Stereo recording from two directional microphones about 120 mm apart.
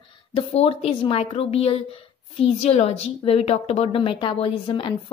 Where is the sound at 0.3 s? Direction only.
55° left (ahead or behind).